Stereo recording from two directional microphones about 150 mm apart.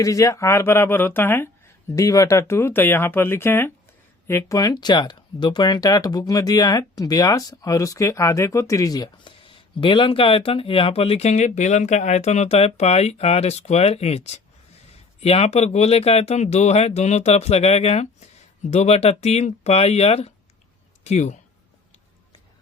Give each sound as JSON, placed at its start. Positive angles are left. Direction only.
{"t": 0.0, "sound": "speech", "side_deg": 20}